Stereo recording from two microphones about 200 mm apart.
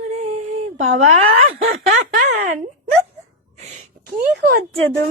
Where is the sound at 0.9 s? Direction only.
35° right (ahead or behind).